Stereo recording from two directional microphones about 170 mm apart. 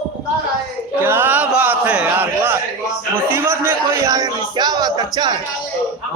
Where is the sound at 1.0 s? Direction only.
15° right (ahead or behind).